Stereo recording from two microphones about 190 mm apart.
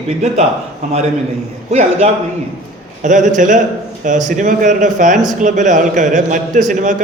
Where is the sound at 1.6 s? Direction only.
35° right (ahead or behind).